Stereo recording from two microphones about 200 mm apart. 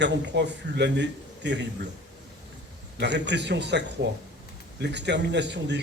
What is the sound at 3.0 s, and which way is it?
A man's voice, 60° right (ahead or behind).